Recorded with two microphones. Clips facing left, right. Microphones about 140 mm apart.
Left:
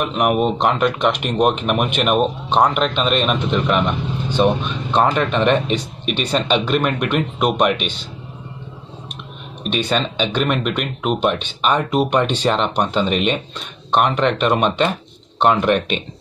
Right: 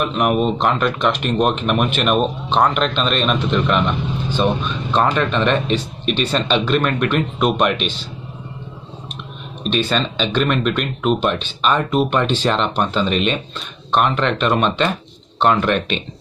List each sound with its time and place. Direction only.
0.0 s speech: 15° left (ahead or behind)
9.7 s speech: 15° left (ahead or behind)